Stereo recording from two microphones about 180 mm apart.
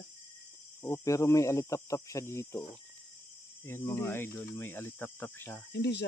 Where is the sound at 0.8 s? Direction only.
15° left (ahead or behind).